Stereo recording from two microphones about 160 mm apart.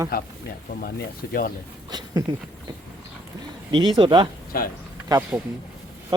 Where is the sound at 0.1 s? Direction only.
70° left (ahead or behind).